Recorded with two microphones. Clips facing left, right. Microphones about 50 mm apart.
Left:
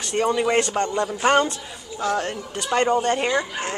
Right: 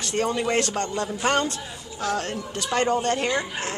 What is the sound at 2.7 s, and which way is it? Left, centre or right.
Speech, centre.